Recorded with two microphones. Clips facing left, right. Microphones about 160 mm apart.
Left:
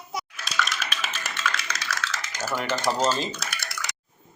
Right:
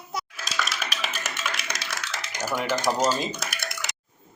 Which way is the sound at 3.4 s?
45° right (ahead or behind).